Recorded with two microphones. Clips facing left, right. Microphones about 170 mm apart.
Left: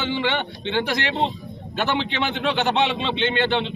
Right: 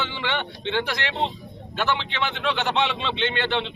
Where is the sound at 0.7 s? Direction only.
45° left (ahead or behind).